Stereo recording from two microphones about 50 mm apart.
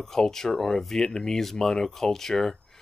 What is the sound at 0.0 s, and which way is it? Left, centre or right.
Speech, centre.